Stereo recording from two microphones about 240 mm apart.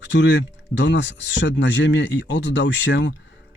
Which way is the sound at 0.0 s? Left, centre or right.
Left.